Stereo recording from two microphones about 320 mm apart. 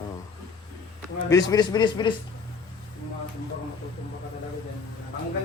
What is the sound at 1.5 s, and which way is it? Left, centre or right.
Speech, centre.